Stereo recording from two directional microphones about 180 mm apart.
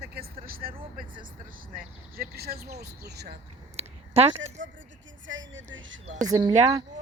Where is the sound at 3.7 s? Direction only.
35° right (ahead or behind).